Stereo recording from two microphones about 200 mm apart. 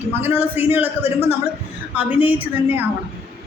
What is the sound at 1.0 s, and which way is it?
Speech, 30° left (ahead or behind).